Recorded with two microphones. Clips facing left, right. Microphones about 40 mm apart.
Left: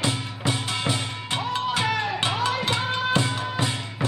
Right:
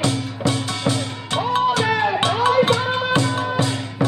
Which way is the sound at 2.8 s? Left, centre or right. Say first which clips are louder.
Right 4 dB; centre.